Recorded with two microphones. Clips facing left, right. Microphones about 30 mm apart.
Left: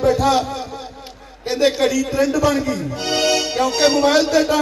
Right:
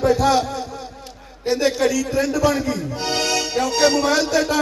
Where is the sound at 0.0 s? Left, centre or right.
Centre.